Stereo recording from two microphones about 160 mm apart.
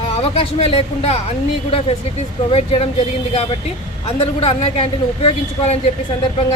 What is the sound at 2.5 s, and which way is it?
Speech, 35° left (ahead or behind).